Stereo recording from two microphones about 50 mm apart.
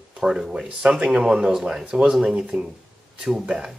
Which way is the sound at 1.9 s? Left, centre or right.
Right.